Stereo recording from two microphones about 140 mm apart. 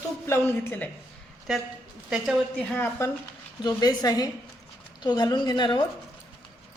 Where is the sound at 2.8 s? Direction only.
15° left (ahead or behind).